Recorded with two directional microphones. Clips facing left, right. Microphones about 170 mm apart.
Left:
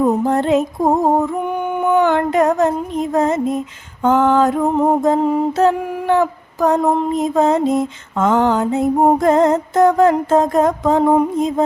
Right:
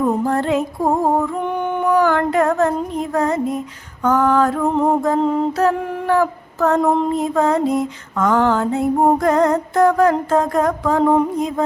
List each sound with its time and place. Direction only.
0.0 s mantra: 20° left (ahead or behind)
4.7 s music: centre (ahead or behind)
5.0 s music: 15° left (ahead or behind)
5.5 s mantra: 25° left (ahead or behind)
6.7 s music: centre (ahead or behind)
7.1 s mantra: 20° left (ahead or behind)